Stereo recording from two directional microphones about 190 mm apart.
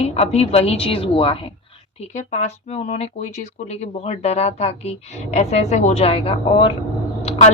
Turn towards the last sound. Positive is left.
turn(degrees=35)  # may be behind; listen again after turning